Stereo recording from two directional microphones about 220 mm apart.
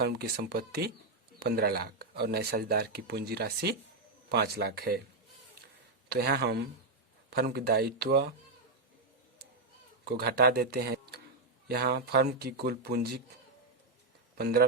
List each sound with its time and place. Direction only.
0.0 s speech: 45° right (ahead or behind)
6.1 s speech: 45° right (ahead or behind)
10.0 s speech: 45° right (ahead or behind)
14.3 s speech: 45° right (ahead or behind)